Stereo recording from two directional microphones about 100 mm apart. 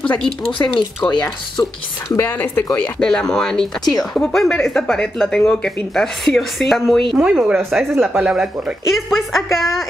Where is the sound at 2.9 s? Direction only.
5° left (ahead or behind).